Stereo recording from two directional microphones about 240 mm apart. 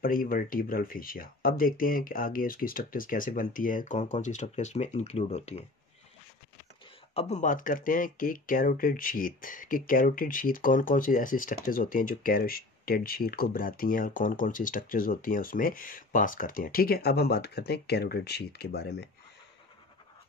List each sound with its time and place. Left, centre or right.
0.0 s speech: left
7.2 s speech: left